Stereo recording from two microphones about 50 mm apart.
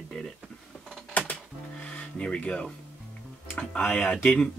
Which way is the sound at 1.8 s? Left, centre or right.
Left.